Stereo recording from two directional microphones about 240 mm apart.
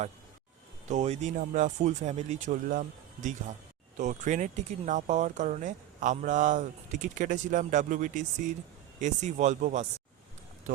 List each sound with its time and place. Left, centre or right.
0.9 s speech: right